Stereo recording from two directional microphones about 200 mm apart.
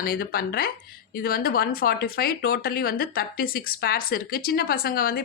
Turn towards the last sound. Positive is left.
turn(degrees=50)  # may be behind; listen again after turning